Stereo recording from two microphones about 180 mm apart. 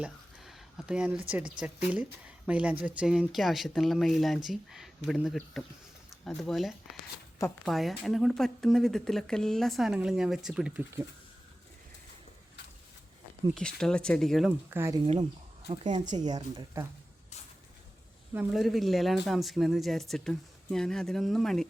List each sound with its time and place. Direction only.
0.0 s a sound: centre (ahead or behind)
1.5 s speech: 5° right (ahead or behind)
6.9 s speech: 20° left (ahead or behind)
7.6 s speech: centre (ahead or behind)
13.5 s speech: 5° left (ahead or behind)
14.7 s speech: 15° right (ahead or behind)
15.7 s a woman's voice: 30° right (ahead or behind)
18.3 s speech: centre (ahead or behind)